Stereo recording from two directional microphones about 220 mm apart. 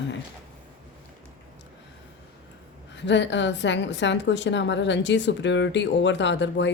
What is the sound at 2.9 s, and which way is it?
A woman's voice, 55° left (ahead or behind).